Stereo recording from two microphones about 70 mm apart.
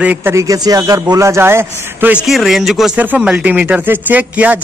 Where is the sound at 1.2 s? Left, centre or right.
Right.